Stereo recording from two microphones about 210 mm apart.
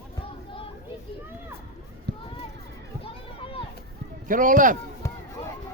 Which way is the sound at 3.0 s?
25° left (ahead or behind).